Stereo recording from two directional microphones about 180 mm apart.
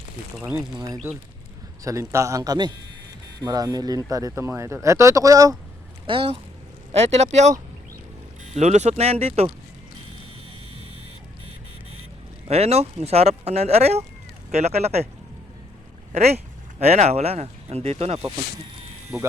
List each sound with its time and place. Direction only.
0.5 s a man's voice: 20° right (ahead or behind)
6.1 s speech: 30° right (ahead or behind)
8.5 s speech: 40° right (ahead or behind)
12.5 s speech: 35° right (ahead or behind)
16.1 s speech: 35° right (ahead or behind)